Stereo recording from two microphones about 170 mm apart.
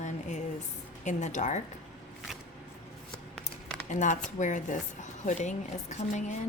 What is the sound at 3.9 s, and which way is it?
A woman's voice, 45° left (ahead or behind).